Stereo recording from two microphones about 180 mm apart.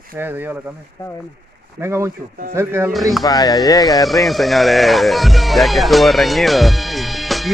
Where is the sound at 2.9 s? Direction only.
Centre (ahead or behind).